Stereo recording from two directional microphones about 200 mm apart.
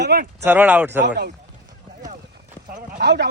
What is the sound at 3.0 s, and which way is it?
Speech, 60° right (ahead or behind).